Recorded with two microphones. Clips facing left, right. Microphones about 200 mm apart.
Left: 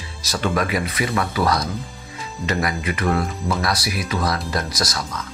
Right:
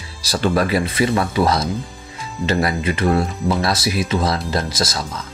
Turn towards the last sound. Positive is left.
turn(degrees=-25)  # may be behind; listen again after turning